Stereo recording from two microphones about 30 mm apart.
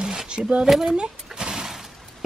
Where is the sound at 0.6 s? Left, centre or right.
Centre.